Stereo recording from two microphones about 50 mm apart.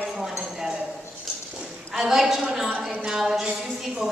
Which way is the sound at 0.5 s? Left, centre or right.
Centre.